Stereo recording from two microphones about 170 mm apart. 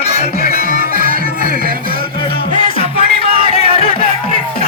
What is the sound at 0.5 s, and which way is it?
Music, 55° right (ahead or behind).